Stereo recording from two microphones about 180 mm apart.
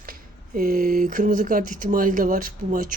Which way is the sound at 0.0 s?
50° right (ahead or behind).